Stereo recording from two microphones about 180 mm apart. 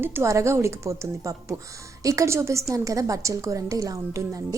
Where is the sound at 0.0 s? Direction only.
15° right (ahead or behind).